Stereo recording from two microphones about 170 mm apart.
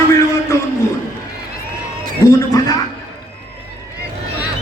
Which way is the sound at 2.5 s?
20° left (ahead or behind).